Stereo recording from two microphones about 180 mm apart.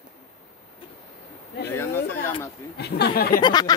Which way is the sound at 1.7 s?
15° left (ahead or behind).